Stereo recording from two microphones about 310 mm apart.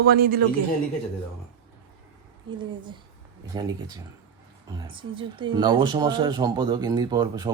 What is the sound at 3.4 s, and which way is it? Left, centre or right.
Speech, centre.